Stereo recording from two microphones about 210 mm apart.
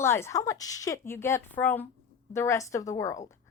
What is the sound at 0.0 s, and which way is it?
A woman's voice, 10° left (ahead or behind).